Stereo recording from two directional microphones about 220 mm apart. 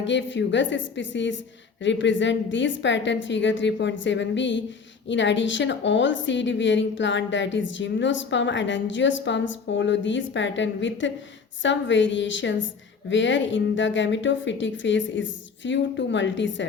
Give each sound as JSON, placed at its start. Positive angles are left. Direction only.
{"t": 0.0, "sound": "a woman's voice", "side_deg": 55}